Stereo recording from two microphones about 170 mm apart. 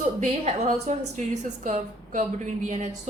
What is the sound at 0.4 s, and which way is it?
A woman's voice, 40° right (ahead or behind).